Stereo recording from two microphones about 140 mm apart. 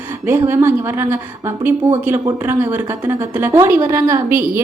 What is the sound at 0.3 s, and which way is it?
A woman's voice, 15° right (ahead or behind).